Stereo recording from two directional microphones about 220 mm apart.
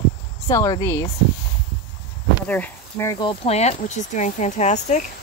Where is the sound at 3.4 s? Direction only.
30° left (ahead or behind).